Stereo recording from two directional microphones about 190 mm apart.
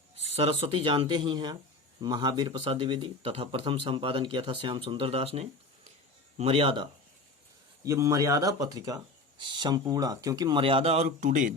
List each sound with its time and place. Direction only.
0.3 s a man's voice: 30° right (ahead or behind)
7.9 s a man's voice: 15° right (ahead or behind); by 11.5 s 40° right (ahead or behind)